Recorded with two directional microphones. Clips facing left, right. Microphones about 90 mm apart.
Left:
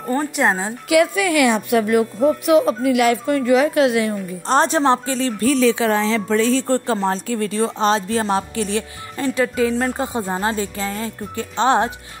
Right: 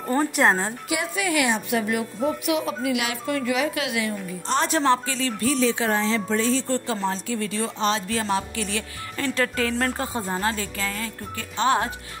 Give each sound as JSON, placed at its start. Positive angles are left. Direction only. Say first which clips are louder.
{"t": 0.0, "sound": "speech", "louder": "left 1 dB", "side_deg": 0}
{"t": 0.8, "sound": "a woman's voice", "louder": "left 14 dB", "side_deg": 75}
{"t": 4.6, "sound": "speech", "louder": "left 4 dB", "side_deg": 25}
{"t": 5.1, "sound": "speech", "louder": "left 6 dB", "side_deg": 40}
{"t": 5.6, "sound": "speech", "louder": "left 5 dB", "side_deg": 90}
{"t": 6.7, "sound": "speech", "louder": "left 6 dB", "side_deg": 45}
{"t": 9.3, "sound": "speech", "louder": "left 6 dB", "side_deg": 10}